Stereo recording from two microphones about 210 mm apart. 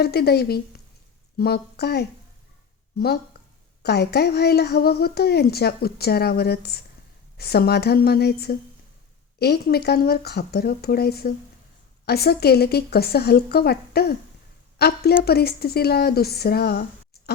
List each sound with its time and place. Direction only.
0.0 s a woman's voice: 50° left (ahead or behind)
3.8 s a woman's voice: 50° left (ahead or behind)